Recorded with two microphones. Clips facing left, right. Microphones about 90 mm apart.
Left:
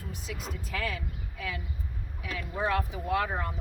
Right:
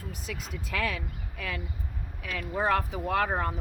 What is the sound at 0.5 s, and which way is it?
A woman's voice, 70° right (ahead or behind).